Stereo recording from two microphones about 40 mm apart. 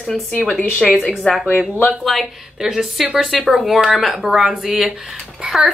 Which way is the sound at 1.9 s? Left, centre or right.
Centre.